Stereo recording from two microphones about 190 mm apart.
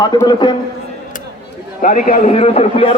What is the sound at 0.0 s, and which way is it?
Speech, 20° left (ahead or behind).